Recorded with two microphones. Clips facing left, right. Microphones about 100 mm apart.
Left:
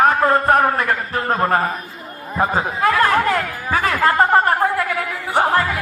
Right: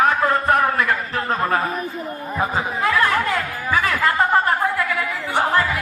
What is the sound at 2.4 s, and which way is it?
Chatter, 40° left (ahead or behind).